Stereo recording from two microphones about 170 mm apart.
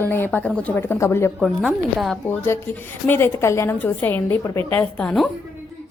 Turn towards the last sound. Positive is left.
turn(degrees=5)  # may be behind; listen again after turning